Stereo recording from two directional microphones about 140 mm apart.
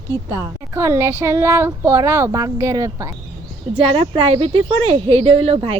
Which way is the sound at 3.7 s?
40° right (ahead or behind).